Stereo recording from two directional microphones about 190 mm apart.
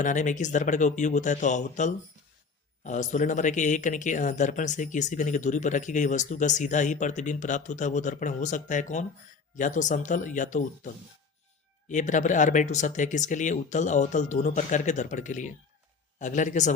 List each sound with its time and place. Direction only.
0.0 s speech: 40° left (ahead or behind)